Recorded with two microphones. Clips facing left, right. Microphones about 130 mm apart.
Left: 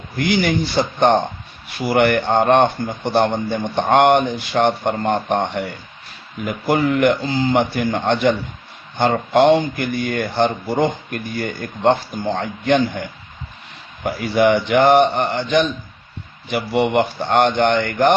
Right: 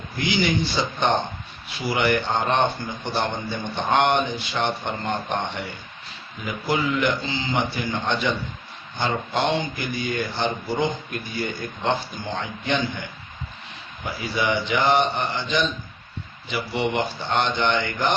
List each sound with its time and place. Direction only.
0.3 s a man's voice: 50° left (ahead or behind)
14.0 s speech: 55° left (ahead or behind)